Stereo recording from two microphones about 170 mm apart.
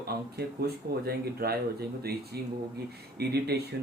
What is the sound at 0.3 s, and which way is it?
Speech, 70° right (ahead or behind).